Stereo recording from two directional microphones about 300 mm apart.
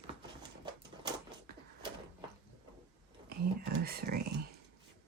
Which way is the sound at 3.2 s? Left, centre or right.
Right.